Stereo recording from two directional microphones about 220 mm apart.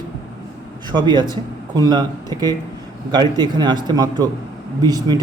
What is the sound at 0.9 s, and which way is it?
A man's voice, 20° right (ahead or behind).